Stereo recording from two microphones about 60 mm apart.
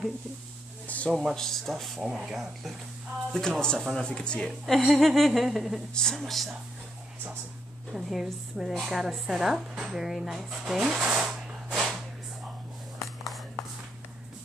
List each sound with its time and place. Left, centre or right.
0.8 s a sound: left
1.1 s a woman's voice: centre
2.0 s speech: centre
3.3 s speech: centre
4.5 s a woman's voice: centre
7.9 s a woman's voice: centre
11.3 s a sound: centre